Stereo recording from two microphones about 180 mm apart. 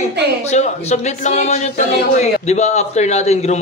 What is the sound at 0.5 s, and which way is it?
A man's voice, 40° left (ahead or behind).